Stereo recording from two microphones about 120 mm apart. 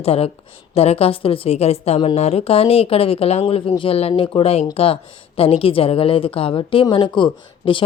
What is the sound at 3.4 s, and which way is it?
A woman's voice, 45° left (ahead or behind).